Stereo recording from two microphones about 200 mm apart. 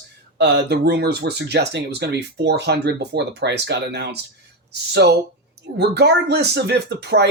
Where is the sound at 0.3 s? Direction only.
55° right (ahead or behind).